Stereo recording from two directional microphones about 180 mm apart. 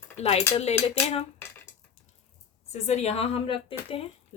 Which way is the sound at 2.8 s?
35° left (ahead or behind).